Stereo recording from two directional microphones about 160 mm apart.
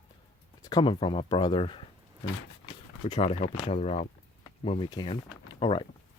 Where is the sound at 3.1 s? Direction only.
35° left (ahead or behind).